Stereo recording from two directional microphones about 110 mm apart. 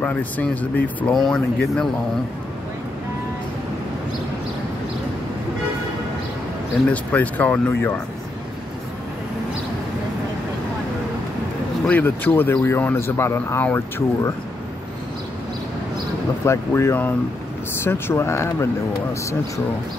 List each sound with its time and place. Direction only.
0.0 s speech: 15° left (ahead or behind)
1.1 s speech: centre (ahead or behind)
6.9 s speech: 15° left (ahead or behind)
11.8 s speech: 15° left (ahead or behind)
16.4 s speech: 25° left (ahead or behind)